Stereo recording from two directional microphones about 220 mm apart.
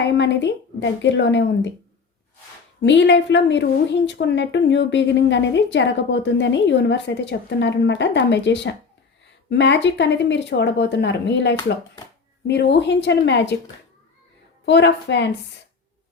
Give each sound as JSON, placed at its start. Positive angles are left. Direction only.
{"t": 0.0, "sound": "a woman's voice", "side_deg": 55}
{"t": 2.8, "sound": "a woman's voice", "side_deg": 55}
{"t": 14.6, "sound": "a woman's voice", "side_deg": 50}